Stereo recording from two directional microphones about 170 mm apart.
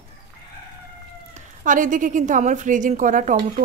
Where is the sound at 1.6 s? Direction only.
50° right (ahead or behind).